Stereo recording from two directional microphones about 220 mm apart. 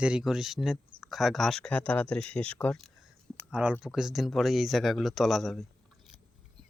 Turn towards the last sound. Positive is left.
turn(degrees=0)  # may be behind; listen again after turning